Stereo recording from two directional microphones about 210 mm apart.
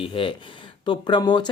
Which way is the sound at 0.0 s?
25° left (ahead or behind).